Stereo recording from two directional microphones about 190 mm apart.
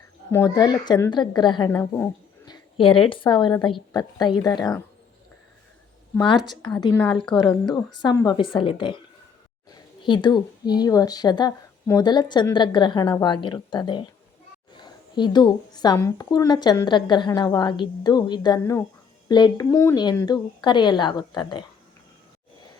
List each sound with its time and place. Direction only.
0.3 s a woman's voice: 15° left (ahead or behind)
1.7 s speech: 10° left (ahead or behind)
6.1 s a woman's voice: 20° left (ahead or behind)
10.0 s a woman's voice: 25° left (ahead or behind)